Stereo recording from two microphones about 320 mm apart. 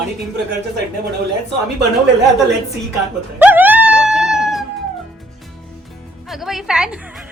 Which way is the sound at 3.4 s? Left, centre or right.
Centre.